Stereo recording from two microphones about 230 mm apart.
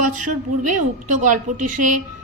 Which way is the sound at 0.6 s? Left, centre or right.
Right.